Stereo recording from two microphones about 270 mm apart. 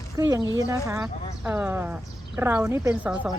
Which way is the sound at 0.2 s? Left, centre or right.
Centre.